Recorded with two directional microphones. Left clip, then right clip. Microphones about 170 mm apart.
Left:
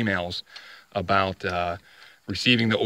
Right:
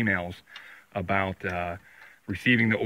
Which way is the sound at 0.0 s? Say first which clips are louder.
Left 1 dB; 25° left (ahead or behind).